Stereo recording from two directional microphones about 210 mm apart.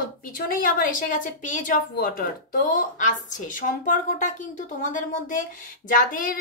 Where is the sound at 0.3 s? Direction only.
40° left (ahead or behind).